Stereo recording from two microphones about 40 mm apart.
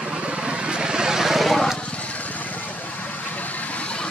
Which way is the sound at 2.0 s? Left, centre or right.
Left.